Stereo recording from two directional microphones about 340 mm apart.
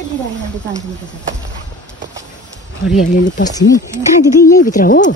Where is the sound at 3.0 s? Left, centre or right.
Left.